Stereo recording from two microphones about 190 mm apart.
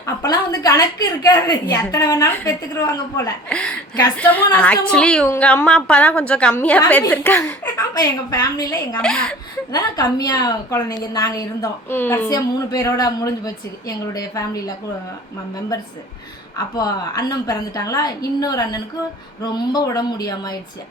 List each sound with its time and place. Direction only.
0.0 s a woman's voice: 15° left (ahead or behind)
9.0 s speech: 5° left (ahead or behind)
9.7 s a woman's voice: 20° left (ahead or behind)
16.6 s a woman's voice: 20° left (ahead or behind)